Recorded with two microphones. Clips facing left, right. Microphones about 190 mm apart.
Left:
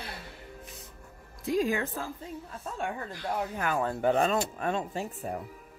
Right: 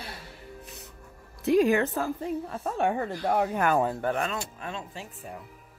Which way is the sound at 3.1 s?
65° right (ahead or behind).